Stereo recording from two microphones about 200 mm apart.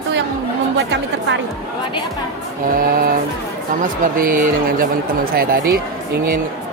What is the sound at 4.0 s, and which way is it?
Speech, 45° right (ahead or behind).